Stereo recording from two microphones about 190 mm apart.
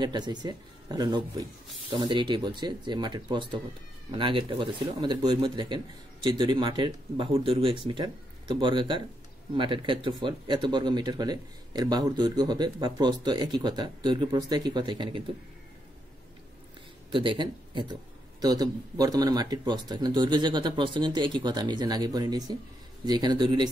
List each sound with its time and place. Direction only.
0.0 s speech: 20° right (ahead or behind)
17.1 s speech: 25° right (ahead or behind)